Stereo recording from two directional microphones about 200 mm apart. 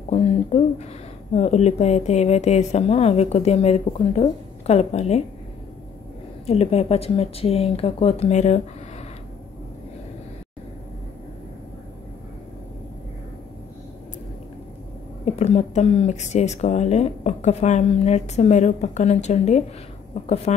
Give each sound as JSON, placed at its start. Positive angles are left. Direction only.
{"t": 0.1, "sound": "speech", "side_deg": 30}
{"t": 6.4, "sound": "speech", "side_deg": 30}
{"t": 15.2, "sound": "speech", "side_deg": 30}